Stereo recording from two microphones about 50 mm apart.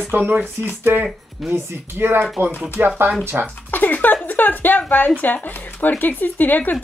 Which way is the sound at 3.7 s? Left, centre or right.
Left.